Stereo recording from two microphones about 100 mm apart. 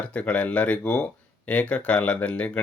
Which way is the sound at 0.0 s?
15° left (ahead or behind).